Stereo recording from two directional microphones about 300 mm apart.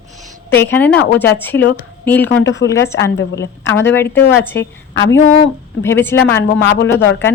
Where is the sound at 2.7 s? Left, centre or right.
Centre.